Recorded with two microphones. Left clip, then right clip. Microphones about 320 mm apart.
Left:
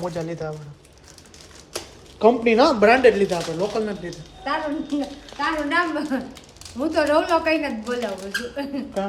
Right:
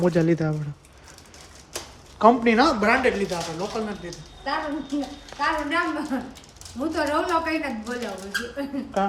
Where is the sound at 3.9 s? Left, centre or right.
Centre.